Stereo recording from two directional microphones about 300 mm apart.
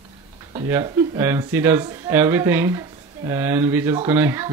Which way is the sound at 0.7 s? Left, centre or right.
Centre.